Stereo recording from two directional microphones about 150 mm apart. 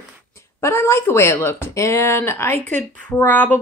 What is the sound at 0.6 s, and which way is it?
Speech, 15° left (ahead or behind).